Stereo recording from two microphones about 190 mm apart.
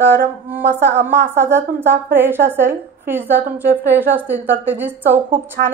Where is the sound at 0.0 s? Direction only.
60° right (ahead or behind).